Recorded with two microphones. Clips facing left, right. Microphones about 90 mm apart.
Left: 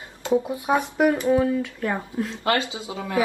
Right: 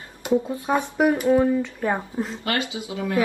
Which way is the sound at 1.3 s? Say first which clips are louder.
Right 2 dB; 15° right (ahead or behind).